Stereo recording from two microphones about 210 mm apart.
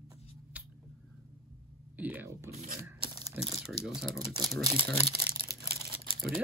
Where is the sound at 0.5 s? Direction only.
5° right (ahead or behind).